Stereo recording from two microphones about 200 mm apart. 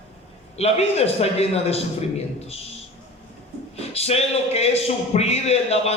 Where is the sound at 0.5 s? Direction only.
30° left (ahead or behind).